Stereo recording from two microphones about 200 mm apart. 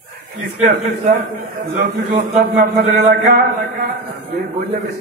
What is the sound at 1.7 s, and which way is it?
A man's voice, 40° right (ahead or behind).